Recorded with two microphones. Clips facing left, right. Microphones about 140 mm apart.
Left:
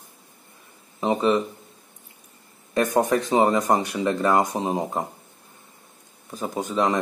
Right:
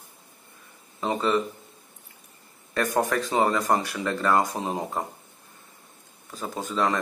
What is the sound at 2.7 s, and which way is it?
Speech, 20° left (ahead or behind).